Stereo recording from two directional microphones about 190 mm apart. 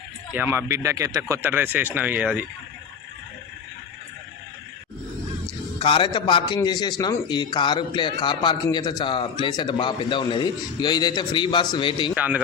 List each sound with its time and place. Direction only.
0.3 s speech: 10° right (ahead or behind)
5.8 s a man's voice: 25° left (ahead or behind)
12.1 s speech: 5° right (ahead or behind)